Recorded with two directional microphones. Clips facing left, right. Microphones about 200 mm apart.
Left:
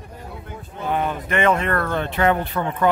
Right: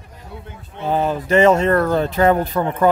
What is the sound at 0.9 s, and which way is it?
Speech, 30° right (ahead or behind).